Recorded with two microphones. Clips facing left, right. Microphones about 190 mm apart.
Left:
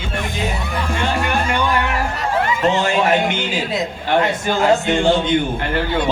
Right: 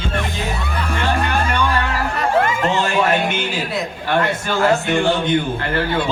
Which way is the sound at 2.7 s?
20° left (ahead or behind).